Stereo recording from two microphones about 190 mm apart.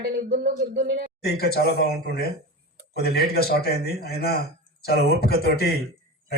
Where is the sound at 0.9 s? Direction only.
50° right (ahead or behind).